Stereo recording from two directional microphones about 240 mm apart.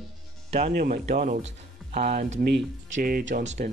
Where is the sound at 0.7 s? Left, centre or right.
Right.